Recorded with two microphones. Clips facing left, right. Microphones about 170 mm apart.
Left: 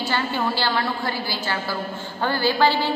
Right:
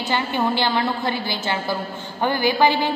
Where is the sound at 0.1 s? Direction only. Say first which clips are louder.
Right 4 dB; 20° right (ahead or behind).